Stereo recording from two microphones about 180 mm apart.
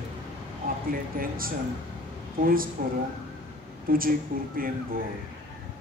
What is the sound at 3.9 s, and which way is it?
Speech, 55° right (ahead or behind).